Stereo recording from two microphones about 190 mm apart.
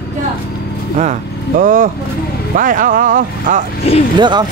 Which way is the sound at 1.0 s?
40° right (ahead or behind).